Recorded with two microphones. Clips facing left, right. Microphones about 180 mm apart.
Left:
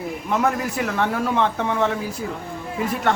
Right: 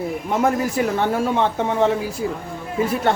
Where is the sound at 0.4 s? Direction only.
30° right (ahead or behind).